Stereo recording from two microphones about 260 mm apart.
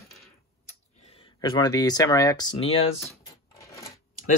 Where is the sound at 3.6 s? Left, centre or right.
Centre.